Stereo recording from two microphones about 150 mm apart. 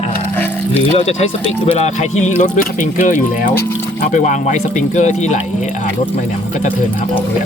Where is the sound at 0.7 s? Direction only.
45° left (ahead or behind).